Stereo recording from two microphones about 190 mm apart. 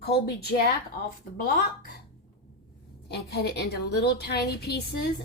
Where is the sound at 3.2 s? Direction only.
60° left (ahead or behind).